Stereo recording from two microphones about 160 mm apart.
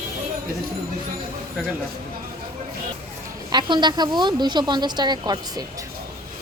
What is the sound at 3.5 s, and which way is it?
A woman's voice, 30° right (ahead or behind).